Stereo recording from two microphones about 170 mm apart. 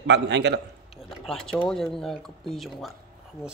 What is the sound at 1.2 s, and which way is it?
Speech, centre (ahead or behind).